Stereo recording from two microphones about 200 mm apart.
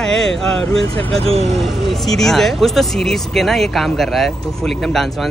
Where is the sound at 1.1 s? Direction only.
30° right (ahead or behind).